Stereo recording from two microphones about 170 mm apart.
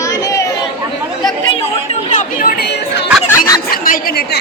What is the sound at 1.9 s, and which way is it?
Chatter, 45° left (ahead or behind).